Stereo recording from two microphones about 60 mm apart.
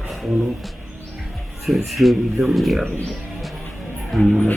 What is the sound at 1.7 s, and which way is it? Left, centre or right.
Speech, centre.